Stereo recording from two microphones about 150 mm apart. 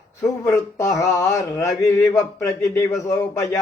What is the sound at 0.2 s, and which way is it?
Speech, 20° left (ahead or behind).